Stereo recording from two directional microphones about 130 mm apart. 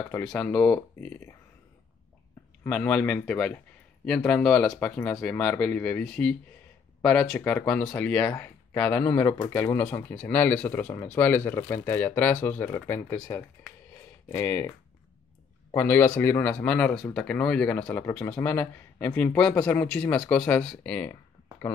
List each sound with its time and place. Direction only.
0.2 s speech: 5° left (ahead or behind)
2.6 s speech: 10° left (ahead or behind)
15.7 s speech: 15° left (ahead or behind)
21.1 s a sound: 15° left (ahead or behind)